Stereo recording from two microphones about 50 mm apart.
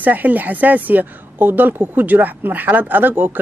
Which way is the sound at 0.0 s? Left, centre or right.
Right.